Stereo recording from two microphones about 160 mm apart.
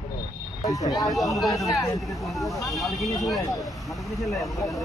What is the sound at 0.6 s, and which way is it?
Speech, 20° left (ahead or behind).